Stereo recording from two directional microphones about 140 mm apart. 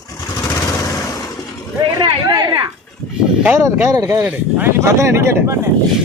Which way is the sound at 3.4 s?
15° right (ahead or behind).